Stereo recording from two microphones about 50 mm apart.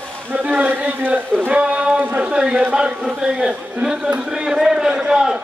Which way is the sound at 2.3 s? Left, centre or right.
Centre.